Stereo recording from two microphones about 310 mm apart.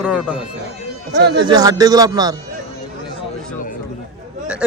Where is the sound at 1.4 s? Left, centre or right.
Centre.